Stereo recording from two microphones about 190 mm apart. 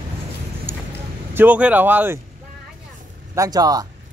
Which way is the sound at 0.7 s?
10° right (ahead or behind).